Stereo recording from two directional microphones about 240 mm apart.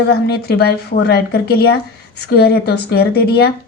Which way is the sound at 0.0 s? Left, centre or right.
Left.